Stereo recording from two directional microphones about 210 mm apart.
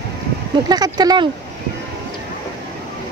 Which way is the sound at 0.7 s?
20° right (ahead or behind).